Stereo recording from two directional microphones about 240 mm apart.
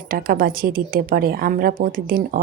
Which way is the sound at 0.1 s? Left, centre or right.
Right.